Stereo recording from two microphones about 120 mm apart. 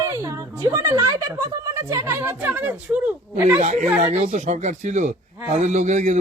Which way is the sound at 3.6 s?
85° right.